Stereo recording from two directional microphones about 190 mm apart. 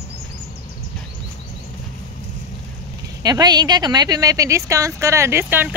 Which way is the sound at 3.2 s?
20° right (ahead or behind).